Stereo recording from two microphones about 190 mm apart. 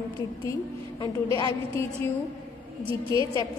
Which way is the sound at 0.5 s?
20° left (ahead or behind).